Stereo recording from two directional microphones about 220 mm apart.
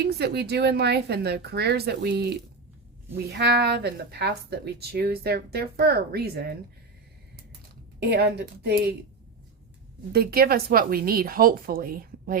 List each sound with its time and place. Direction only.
0.0 s speech: 50° right (ahead or behind)
7.9 s speech: 45° right (ahead or behind)
10.1 s speech: 45° right (ahead or behind)